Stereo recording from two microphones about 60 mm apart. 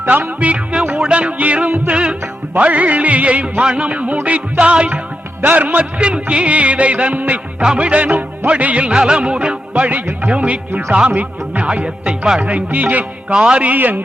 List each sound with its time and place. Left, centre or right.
0.3 s music: right
5.4 s music: right
10.7 s speech: right
11.1 s music: right
13.3 s music: centre